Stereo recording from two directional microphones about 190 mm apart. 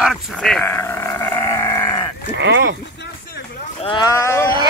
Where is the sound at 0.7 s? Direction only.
15° left (ahead or behind).